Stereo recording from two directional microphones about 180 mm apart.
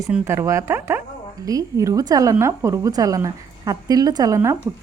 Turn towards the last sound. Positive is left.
turn(degrees=-15)  # may be behind; listen again after turning